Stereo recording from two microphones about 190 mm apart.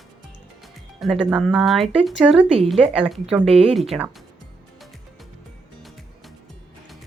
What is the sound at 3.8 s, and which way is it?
Speech, 5° right (ahead or behind).